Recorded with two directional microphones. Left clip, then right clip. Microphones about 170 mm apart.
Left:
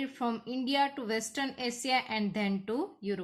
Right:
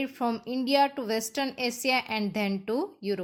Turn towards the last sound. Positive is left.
turn(degrees=-25)  # may be behind; listen again after turning